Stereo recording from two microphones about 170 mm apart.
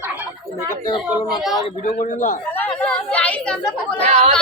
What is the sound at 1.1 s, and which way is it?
Speech, centre (ahead or behind).